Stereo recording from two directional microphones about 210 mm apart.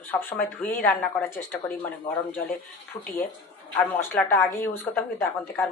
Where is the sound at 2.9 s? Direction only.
30° left (ahead or behind).